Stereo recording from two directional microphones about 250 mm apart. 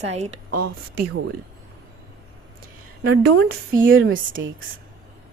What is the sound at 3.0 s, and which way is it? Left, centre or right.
Speech, right.